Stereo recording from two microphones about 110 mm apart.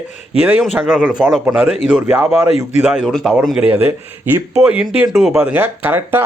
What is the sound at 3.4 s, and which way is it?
Speech, 10° right (ahead or behind).